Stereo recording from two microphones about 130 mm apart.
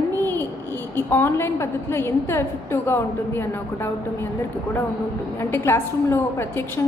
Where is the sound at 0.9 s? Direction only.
20° left (ahead or behind).